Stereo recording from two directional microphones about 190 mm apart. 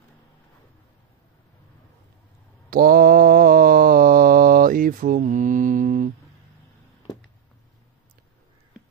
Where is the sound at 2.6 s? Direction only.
50° right (ahead or behind).